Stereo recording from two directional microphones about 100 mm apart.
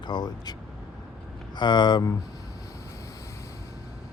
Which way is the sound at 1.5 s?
50° left (ahead or behind).